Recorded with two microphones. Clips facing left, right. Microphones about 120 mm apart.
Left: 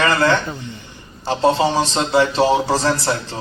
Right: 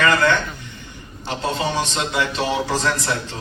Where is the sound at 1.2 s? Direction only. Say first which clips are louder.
Left 7 dB; 30° left (ahead or behind).